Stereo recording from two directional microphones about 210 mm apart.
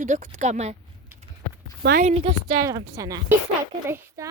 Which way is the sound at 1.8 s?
40° right (ahead or behind).